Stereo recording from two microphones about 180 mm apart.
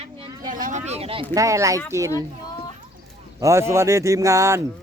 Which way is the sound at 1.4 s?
15° right (ahead or behind).